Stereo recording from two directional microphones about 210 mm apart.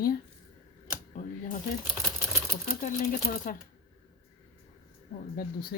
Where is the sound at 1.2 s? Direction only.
40° left (ahead or behind).